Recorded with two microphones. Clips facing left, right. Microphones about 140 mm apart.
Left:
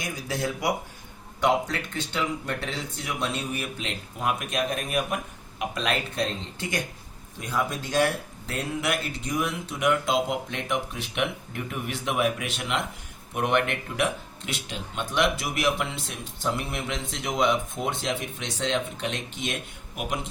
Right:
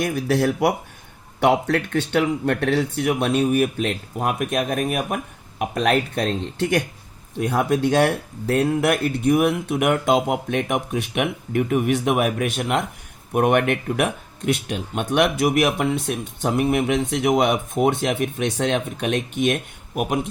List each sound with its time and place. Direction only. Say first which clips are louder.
0.0 s speech: right 10 dB; 65° right (ahead or behind)